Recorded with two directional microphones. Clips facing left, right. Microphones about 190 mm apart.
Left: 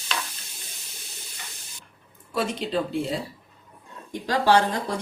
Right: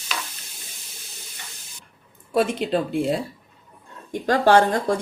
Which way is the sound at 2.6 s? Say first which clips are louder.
Right 6 dB; 55° right (ahead or behind).